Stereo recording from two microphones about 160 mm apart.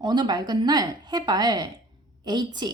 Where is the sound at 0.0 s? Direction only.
25° right (ahead or behind).